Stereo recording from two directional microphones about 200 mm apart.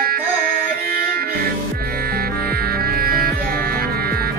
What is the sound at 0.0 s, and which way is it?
Music, 50° right (ahead or behind).